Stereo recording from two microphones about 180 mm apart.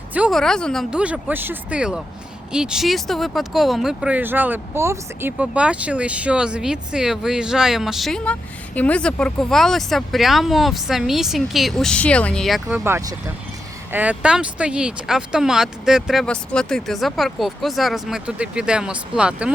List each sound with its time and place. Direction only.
0.1 s speech: 5° right (ahead or behind)